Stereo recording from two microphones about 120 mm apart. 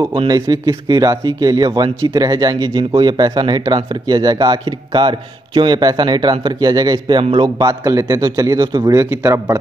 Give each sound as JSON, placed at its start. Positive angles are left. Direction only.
{"t": 0.3, "sound": "a man's voice", "side_deg": -35}